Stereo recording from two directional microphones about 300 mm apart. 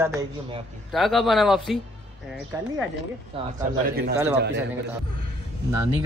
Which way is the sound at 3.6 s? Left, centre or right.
Right.